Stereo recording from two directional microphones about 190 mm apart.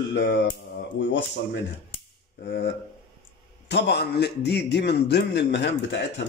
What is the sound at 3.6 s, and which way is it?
Speech, 65° left (ahead or behind).